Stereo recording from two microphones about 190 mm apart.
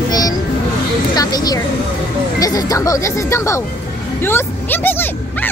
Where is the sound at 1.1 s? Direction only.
20° left (ahead or behind).